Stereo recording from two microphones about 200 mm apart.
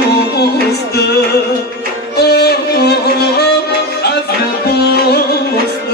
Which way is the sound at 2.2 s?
55° left (ahead or behind).